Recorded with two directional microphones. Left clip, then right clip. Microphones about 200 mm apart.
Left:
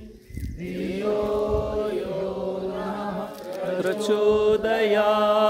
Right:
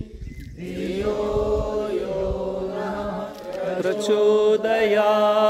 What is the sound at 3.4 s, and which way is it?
Chant, 5° left (ahead or behind).